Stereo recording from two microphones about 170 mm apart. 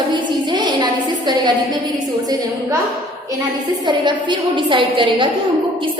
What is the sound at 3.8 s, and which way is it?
A woman's voice, 25° right (ahead or behind).